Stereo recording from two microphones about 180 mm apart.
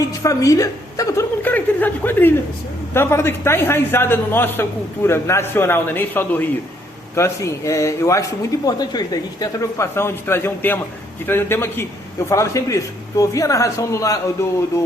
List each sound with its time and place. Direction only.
0.2 s chuckle: 20° left (ahead or behind)
2.9 s speech: 15° left (ahead or behind)